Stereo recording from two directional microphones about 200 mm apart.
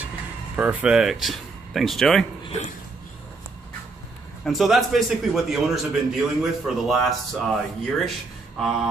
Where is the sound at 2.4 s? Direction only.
35° left (ahead or behind).